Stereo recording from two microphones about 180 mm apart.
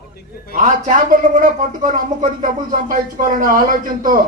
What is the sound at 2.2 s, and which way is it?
A man's voice, 45° right (ahead or behind).